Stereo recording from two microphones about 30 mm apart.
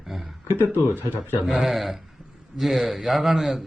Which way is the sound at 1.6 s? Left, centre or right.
Centre.